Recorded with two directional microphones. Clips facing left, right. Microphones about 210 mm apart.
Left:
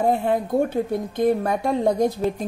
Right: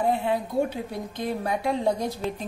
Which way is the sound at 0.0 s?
45° left (ahead or behind).